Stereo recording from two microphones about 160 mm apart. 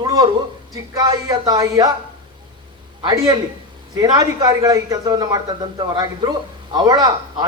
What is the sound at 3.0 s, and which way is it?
Speech, 20° right (ahead or behind).